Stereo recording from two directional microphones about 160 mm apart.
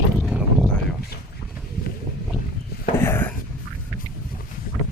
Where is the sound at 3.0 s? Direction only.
15° left (ahead or behind).